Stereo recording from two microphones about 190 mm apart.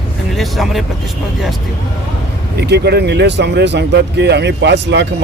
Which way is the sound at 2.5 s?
60° right (ahead or behind).